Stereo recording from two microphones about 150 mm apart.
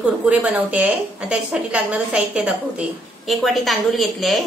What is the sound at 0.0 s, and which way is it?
A woman's voice, 10° right (ahead or behind).